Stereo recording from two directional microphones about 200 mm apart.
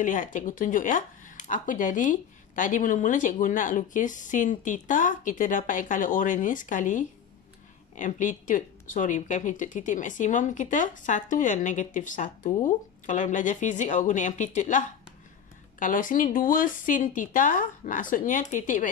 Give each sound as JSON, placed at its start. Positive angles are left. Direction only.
{"t": 0.0, "sound": "speech", "side_deg": 40}